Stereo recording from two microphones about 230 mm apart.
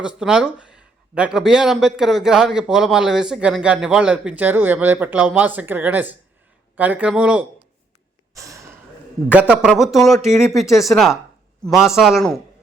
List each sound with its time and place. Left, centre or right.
0.0 s speech: centre
8.3 s a sound: centre
9.3 s speech: centre